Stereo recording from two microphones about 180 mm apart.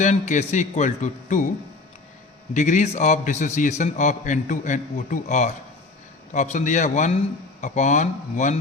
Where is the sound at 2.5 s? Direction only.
40° left (ahead or behind).